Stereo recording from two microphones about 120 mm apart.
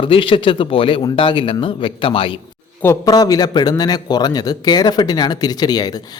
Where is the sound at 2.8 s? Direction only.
30° left (ahead or behind).